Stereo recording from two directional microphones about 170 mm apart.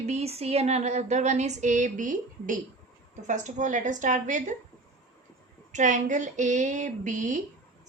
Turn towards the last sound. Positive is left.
turn(degrees=-45)  # may be behind; listen again after turning